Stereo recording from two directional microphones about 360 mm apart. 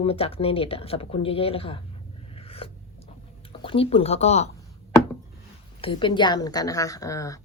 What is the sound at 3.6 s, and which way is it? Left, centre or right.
Speech, centre.